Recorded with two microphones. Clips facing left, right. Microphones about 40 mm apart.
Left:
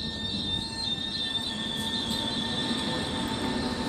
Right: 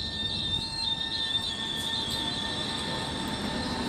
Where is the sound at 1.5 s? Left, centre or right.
Centre.